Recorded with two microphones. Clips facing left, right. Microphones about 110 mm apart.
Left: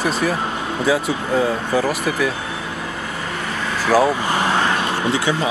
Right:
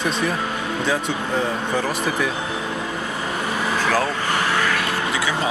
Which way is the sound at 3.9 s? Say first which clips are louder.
Left 10 dB; 15° left (ahead or behind).